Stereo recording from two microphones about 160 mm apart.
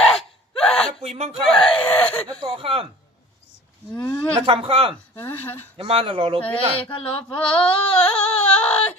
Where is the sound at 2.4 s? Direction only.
35° right (ahead or behind).